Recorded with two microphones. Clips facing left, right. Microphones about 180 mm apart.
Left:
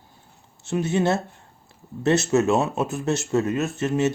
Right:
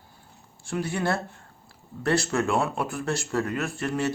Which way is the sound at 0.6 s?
20° left (ahead or behind).